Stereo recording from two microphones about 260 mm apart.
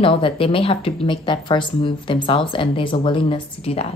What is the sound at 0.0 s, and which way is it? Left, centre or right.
Speech, left.